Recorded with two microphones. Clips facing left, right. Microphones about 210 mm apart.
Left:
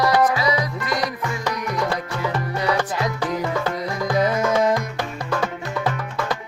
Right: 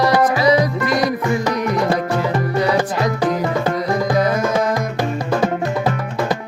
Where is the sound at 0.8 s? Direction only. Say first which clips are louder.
Right 7 dB; 50° right (ahead or behind).